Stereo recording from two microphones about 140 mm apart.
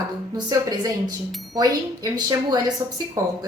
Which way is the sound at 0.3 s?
30° right (ahead or behind).